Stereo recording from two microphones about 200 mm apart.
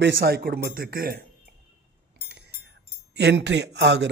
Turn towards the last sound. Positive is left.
turn(degrees=-55)  # may be behind; listen again after turning